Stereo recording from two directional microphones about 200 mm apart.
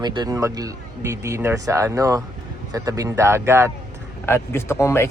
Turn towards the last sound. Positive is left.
turn(degrees=10)  # may be behind; listen again after turning